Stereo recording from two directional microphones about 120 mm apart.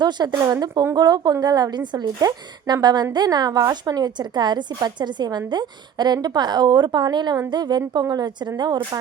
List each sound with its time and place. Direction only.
0.0 s a woman's voice: 35° right (ahead or behind)